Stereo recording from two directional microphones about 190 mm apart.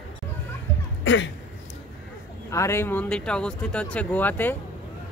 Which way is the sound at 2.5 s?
15° left (ahead or behind).